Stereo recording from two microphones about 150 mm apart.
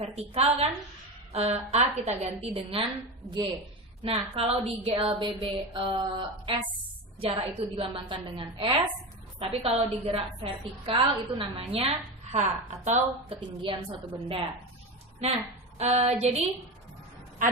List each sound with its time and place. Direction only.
0.0 s a woman's voice: 45° right (ahead or behind)
15.8 s a woman's voice: 45° right (ahead or behind)